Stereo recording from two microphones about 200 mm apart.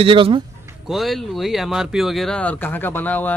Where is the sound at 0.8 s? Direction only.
Centre (ahead or behind).